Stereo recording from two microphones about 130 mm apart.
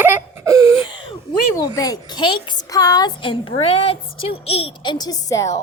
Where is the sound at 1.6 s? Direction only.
30° left (ahead or behind); by 4.7 s 50° left (ahead or behind).